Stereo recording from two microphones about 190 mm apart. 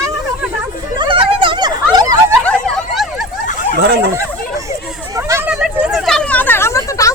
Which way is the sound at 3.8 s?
60° right (ahead or behind).